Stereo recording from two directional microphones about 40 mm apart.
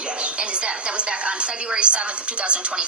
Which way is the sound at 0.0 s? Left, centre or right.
Right.